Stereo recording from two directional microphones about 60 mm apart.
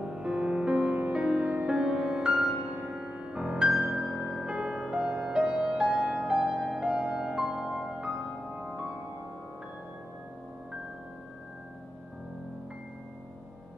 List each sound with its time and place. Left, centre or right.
0.0 s music: centre
6.5 s music: centre
6.8 s music: centre
8.5 s music: right